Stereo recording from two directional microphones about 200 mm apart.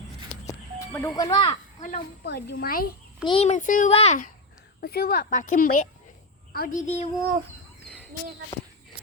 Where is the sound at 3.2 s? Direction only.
30° left (ahead or behind).